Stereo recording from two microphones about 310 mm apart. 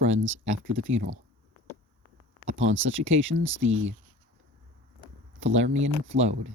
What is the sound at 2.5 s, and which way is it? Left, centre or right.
Speech, right.